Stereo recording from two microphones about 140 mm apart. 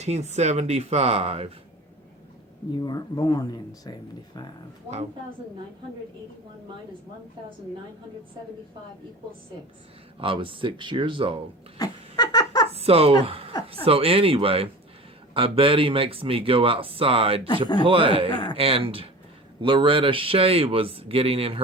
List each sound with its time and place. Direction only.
0.0 s speech: 55° right (ahead or behind)
2.7 s speech: 30° left (ahead or behind)
10.2 s speech: 40° right (ahead or behind)
11.8 s a sound: 30° left (ahead or behind)
12.7 s a woman's voice: 45° right (ahead or behind)